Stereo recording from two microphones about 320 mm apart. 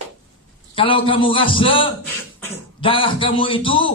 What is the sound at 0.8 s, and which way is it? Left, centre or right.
Speech, centre.